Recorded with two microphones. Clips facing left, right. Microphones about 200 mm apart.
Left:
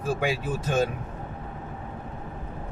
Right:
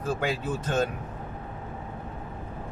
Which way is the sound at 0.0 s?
10° left (ahead or behind).